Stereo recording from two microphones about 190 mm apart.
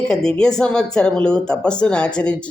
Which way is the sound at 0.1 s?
5° left (ahead or behind).